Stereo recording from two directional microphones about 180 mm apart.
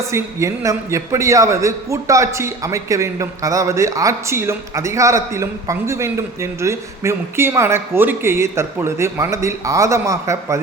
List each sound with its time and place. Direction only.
0.1 s a man's voice: 15° right (ahead or behind)